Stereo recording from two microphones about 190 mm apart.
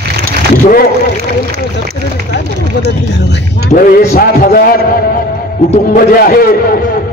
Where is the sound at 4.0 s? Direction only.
50° left (ahead or behind).